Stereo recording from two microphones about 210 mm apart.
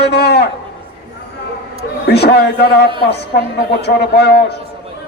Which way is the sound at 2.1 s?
50° left (ahead or behind).